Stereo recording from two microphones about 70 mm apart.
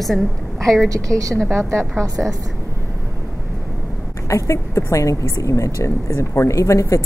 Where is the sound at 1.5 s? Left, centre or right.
Right.